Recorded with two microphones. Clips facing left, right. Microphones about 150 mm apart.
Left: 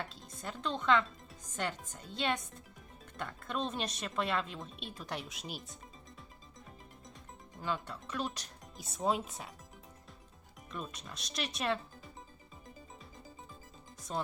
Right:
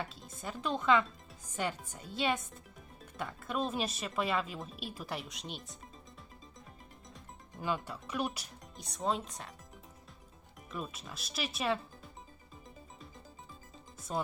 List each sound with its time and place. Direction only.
0.0 s speech: centre (ahead or behind)
7.6 s speech: 10° right (ahead or behind)
8.7 s speech: 5° left (ahead or behind)
10.7 s speech: 5° right (ahead or behind)
14.1 s speech: 5° right (ahead or behind)